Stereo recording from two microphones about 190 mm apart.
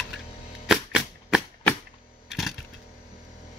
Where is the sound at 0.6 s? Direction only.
5° right (ahead or behind).